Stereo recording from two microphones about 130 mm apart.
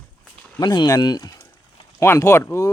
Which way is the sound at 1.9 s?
20° left (ahead or behind).